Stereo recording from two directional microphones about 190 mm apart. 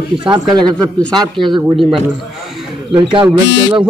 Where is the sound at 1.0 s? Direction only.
5° left (ahead or behind).